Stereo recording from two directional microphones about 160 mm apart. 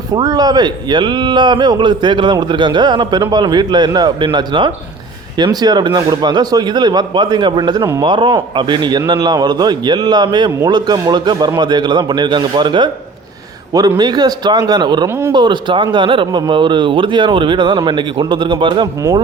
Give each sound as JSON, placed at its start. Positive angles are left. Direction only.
{"t": 0.1, "sound": "a man's voice", "side_deg": -25}